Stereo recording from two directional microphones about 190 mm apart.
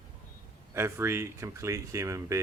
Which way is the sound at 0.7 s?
15° right (ahead or behind).